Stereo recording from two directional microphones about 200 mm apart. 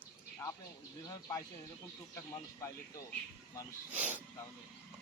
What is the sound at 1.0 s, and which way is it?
Speech, 20° left (ahead or behind).